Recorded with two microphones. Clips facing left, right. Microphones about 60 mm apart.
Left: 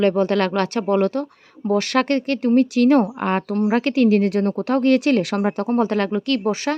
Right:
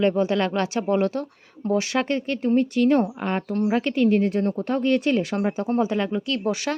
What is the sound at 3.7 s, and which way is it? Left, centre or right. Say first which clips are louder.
Speech: left 5 dB; left.